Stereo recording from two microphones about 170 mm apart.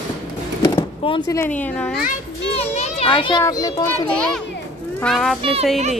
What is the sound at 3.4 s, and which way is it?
Speech, 20° left (ahead or behind).